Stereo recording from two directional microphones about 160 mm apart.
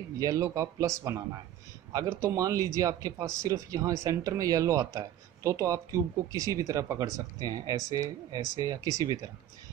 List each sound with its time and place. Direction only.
0.2 s speech: 20° right (ahead or behind)